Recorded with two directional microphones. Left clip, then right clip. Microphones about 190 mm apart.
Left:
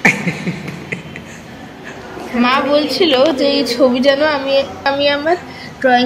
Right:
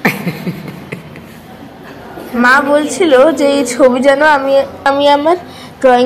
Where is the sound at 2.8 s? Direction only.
10° right (ahead or behind).